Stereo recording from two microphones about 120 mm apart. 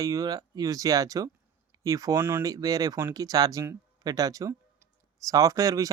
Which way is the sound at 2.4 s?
30° right (ahead or behind).